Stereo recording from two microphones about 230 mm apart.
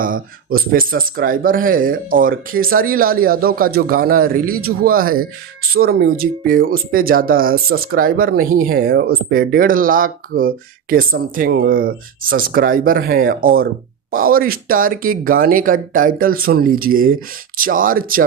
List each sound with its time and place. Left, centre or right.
0.0 s speech: right